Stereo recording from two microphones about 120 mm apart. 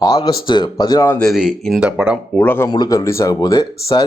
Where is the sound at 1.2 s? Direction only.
5° right (ahead or behind).